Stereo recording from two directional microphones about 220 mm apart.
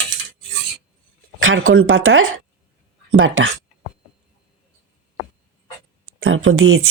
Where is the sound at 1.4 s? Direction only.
65° right (ahead or behind).